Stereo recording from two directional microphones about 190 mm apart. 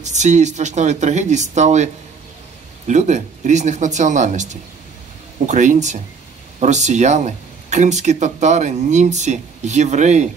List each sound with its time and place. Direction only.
0.0 s speech: 40° right (ahead or behind)
2.9 s speech: 40° right (ahead or behind)